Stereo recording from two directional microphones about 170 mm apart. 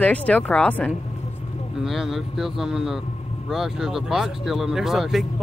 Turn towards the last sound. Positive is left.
turn(degrees=0)  # may be behind; listen again after turning